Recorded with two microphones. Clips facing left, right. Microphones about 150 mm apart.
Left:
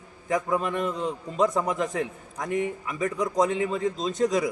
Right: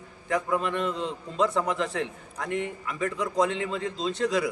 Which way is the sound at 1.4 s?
15° left (ahead or behind).